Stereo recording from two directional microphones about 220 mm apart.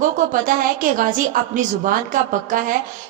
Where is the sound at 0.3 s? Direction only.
40° right (ahead or behind).